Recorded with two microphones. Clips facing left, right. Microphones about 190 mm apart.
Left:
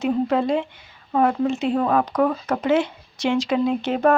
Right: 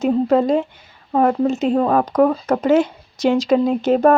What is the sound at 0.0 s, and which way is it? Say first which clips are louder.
Speech: right 5 dB; 40° right (ahead or behind).